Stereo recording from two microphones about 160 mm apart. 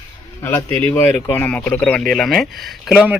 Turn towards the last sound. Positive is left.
turn(degrees=-5)  # may be behind; listen again after turning